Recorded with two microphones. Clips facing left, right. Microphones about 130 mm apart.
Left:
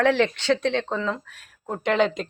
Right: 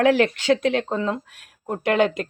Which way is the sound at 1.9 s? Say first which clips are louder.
Right 2 dB; 55° right (ahead or behind).